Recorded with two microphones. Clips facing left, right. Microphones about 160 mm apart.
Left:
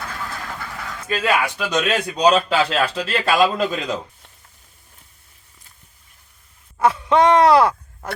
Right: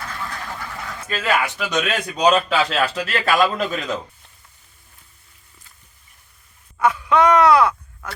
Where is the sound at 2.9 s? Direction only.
25° left (ahead or behind).